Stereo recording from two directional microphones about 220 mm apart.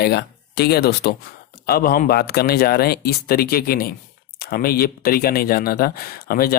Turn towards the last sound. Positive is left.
turn(degrees=40)  # may be behind; listen again after turning